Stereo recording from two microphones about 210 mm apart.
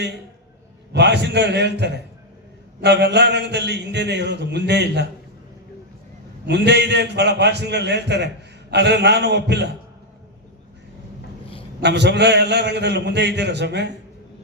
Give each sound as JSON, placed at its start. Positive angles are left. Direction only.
{"t": 0.9, "sound": "a man's voice", "side_deg": -55}
{"t": 6.4, "sound": "a man's voice", "side_deg": -55}
{"t": 11.8, "sound": "a man's voice", "side_deg": -55}